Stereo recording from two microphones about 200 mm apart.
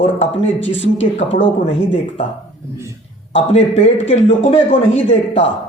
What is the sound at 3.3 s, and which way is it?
Speech, 30° left (ahead or behind).